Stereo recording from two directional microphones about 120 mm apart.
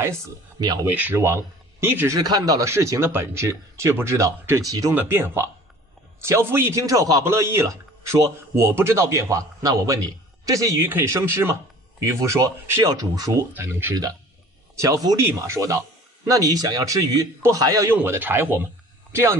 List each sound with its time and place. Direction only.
0.8 s a man's voice: 15° right (ahead or behind)
2.1 s a man's voice: 35° right (ahead or behind)
4.9 s a man's voice: 20° right (ahead or behind)
17.9 s a man's voice: 15° right (ahead or behind)